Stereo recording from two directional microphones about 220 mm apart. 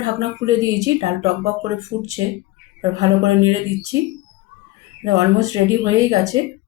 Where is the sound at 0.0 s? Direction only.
15° right (ahead or behind).